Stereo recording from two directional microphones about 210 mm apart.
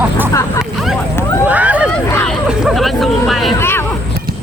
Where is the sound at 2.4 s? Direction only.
Centre (ahead or behind).